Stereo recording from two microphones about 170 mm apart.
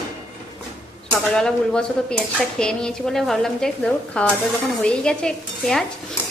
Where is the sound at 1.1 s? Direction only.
5° left (ahead or behind).